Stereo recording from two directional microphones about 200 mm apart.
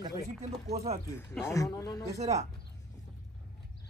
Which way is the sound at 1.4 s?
15° left (ahead or behind).